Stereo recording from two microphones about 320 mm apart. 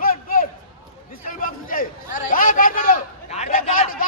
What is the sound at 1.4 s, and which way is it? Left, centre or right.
A man's voice, left.